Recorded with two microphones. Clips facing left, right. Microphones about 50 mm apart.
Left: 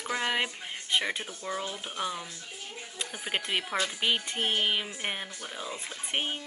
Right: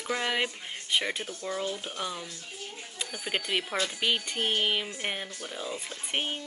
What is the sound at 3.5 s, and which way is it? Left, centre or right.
Speech, centre.